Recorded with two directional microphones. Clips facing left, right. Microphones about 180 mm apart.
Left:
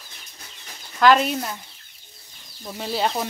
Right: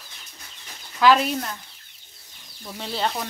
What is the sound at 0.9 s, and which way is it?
Speech, centre (ahead or behind).